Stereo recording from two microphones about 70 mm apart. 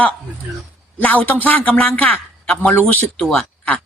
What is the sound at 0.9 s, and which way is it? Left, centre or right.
Speech, left.